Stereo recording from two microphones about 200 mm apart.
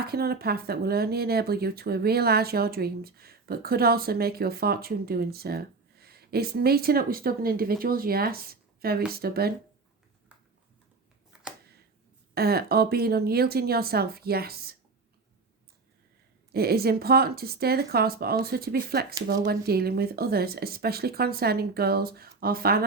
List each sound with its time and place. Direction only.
0.0 s speech: 50° right (ahead or behind)
12.3 s speech: 50° right (ahead or behind)
16.5 s speech: 50° right (ahead or behind)